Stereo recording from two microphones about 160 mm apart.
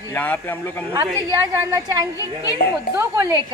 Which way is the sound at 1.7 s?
20° right (ahead or behind).